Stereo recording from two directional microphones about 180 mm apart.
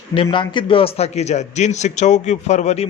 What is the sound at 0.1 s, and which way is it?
A man's voice, 30° left (ahead or behind).